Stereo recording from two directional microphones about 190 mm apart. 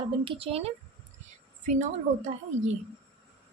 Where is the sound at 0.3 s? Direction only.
30° right (ahead or behind).